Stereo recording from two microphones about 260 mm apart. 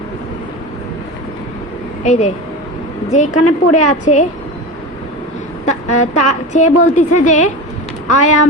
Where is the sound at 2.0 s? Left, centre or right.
Left.